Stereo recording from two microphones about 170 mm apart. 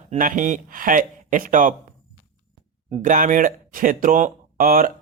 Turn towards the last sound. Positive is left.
turn(degrees=-55)  # may be behind; listen again after turning